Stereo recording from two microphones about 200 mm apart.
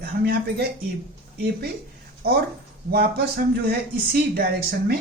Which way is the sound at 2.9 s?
50° right (ahead or behind).